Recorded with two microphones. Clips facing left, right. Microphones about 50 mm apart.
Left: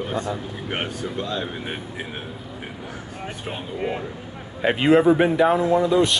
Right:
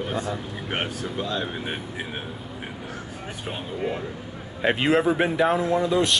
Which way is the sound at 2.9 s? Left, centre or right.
Centre.